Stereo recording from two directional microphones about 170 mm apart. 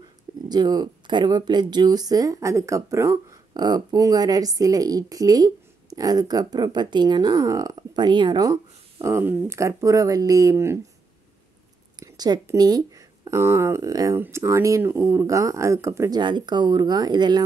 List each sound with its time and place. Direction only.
0.5 s speech: 25° right (ahead or behind)
12.0 s speech: 25° right (ahead or behind)